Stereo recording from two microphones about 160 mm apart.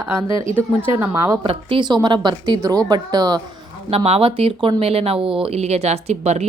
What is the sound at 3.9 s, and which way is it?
Speech, 35° right (ahead or behind).